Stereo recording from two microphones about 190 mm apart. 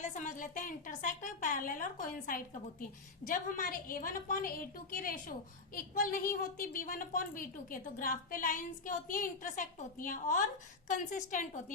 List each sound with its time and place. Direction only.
0.0 s a woman's voice: 40° left (ahead or behind)